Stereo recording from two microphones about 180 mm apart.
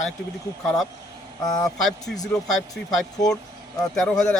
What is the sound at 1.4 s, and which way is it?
Speech, 20° left (ahead or behind).